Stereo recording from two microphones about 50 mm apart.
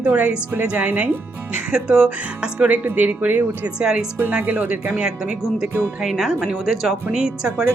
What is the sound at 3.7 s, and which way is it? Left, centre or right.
Speech, centre.